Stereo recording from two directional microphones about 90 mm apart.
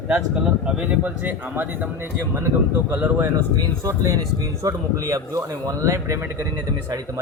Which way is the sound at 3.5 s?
40° right (ahead or behind).